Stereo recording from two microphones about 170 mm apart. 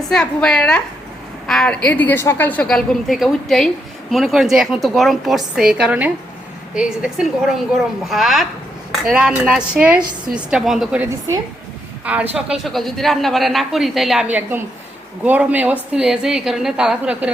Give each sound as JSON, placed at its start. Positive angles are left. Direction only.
{"t": 0.1, "sound": "a woman's voice", "side_deg": 5}
{"t": 12.0, "sound": "a woman's voice", "side_deg": -10}
{"t": 12.6, "sound": "a woman's voice", "side_deg": 0}